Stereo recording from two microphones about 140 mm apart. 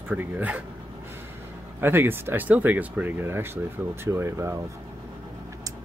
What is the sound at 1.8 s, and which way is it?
Speech, 15° right (ahead or behind).